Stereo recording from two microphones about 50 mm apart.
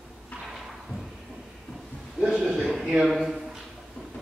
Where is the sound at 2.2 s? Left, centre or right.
Centre.